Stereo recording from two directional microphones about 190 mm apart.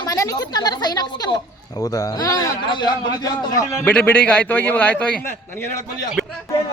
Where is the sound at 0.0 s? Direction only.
20° left (ahead or behind).